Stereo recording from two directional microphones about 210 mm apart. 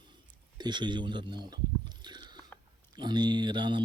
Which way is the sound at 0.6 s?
20° right (ahead or behind).